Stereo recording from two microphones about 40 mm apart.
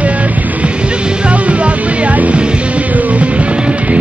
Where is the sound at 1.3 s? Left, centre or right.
Right.